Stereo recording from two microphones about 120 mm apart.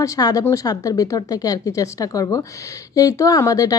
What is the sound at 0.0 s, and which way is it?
Speech, 30° left (ahead or behind).